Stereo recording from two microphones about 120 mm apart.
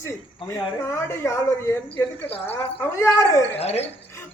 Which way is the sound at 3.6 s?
60° left (ahead or behind).